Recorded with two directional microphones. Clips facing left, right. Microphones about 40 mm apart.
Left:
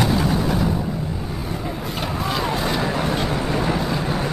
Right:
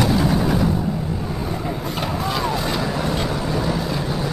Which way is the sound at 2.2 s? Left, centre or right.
Centre.